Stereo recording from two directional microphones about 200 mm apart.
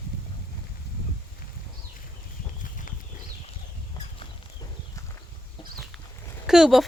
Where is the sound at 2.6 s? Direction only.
40° left (ahead or behind).